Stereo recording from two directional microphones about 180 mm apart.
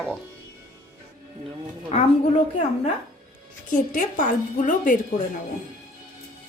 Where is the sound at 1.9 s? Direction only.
40° left (ahead or behind).